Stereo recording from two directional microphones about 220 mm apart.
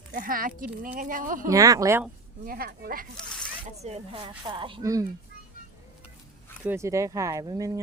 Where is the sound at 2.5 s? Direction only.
45° right (ahead or behind).